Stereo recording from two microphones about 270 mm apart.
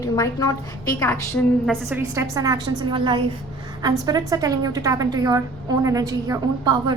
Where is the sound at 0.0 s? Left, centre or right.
Centre.